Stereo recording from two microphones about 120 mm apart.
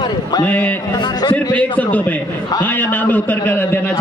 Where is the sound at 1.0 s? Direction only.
40° left (ahead or behind).